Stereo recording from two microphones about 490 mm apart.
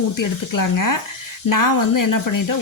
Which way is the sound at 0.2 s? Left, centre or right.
Left.